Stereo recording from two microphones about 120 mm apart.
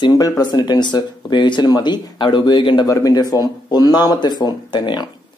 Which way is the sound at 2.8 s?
30° left (ahead or behind).